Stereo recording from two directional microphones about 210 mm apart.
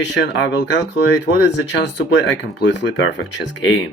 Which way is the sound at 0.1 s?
60° left (ahead or behind).